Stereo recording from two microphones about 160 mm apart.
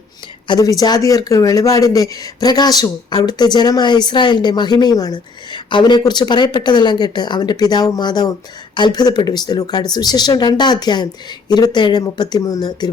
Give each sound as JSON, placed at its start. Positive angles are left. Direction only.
{"t": 0.4, "sound": "speech", "side_deg": 25}